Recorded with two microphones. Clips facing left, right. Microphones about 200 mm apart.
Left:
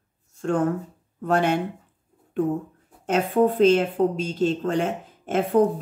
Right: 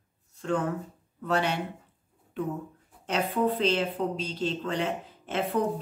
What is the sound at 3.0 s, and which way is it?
Speech, 50° left (ahead or behind).